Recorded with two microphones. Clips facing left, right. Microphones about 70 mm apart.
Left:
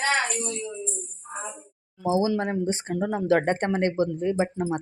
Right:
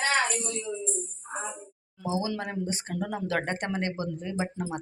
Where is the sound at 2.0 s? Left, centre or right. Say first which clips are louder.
Left 7 dB; left.